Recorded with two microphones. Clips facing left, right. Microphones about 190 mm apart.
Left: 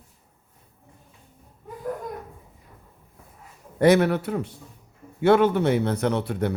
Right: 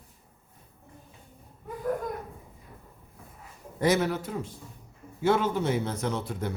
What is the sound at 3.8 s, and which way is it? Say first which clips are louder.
A man's voice: left 7 dB; 60° left (ahead or behind).